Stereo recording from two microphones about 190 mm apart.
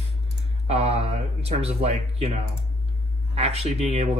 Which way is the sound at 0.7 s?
35° right (ahead or behind).